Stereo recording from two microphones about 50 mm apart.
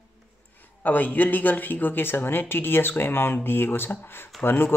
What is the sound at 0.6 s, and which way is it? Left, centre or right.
Speech, left.